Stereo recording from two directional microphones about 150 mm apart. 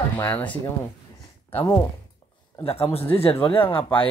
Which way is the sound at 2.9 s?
40° left (ahead or behind).